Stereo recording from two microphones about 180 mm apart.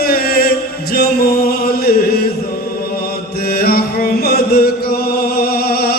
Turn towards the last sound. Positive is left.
turn(degrees=60)  # may be behind; listen again after turning